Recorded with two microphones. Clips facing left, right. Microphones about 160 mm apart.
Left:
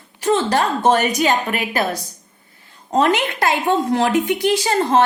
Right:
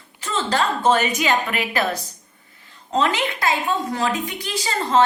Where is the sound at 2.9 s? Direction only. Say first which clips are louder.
Left 4 dB; 55° left (ahead or behind).